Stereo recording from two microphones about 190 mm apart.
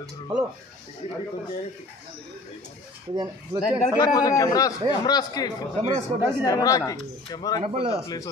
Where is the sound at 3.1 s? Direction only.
20° right (ahead or behind).